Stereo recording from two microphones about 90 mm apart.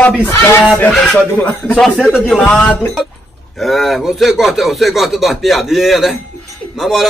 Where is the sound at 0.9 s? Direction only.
10° left (ahead or behind).